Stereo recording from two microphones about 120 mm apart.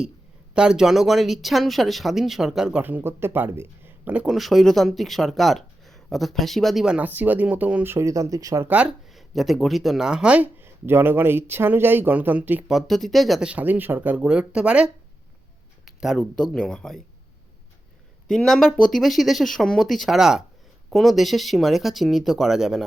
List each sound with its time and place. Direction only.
0.5 s speech: 5° right (ahead or behind)
2.8 s speech: 15° right (ahead or behind)
7.9 s speech: 25° right (ahead or behind)
8.6 s speech: 10° right (ahead or behind)
12.7 s speech: centre (ahead or behind)
16.0 s speech: centre (ahead or behind)
18.3 s speech: centre (ahead or behind)